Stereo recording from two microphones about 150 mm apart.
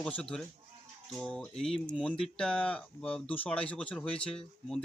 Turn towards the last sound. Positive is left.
turn(degrees=5)  # may be behind; listen again after turning